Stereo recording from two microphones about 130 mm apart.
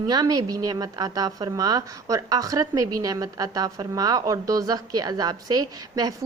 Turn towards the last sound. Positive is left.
turn(degrees=-30)  # may be behind; listen again after turning